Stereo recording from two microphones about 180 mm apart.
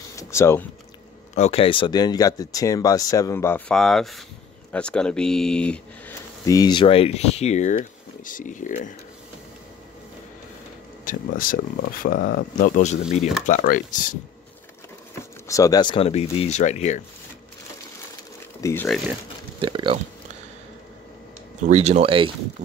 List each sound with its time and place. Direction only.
0.1 s a sound: 15° left (ahead or behind)
1.3 s speech: 35° left (ahead or behind); by 6.1 s 5° left (ahead or behind)
6.4 s speech: 20° left (ahead or behind); by 8.9 s 45° left (ahead or behind)
11.1 s speech: 50° left (ahead or behind)
15.4 s speech: 20° left (ahead or behind); by 17.0 s 40° left (ahead or behind)
18.6 s speech: 15° left (ahead or behind)
19.6 s speech: 30° right (ahead or behind)
21.6 s speech: 40° right (ahead or behind)